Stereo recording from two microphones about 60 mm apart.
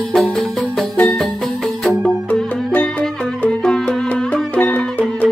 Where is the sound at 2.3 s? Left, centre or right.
Left.